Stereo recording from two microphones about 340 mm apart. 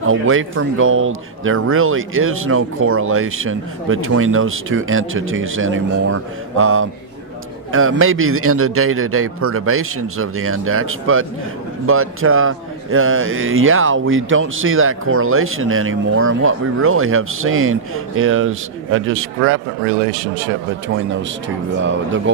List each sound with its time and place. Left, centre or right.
0.0 s a man's voice: right